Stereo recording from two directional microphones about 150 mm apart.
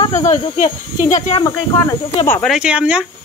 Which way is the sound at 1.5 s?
20° left (ahead or behind).